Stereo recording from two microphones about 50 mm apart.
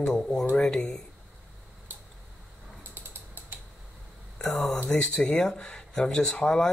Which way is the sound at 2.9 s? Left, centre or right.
Right.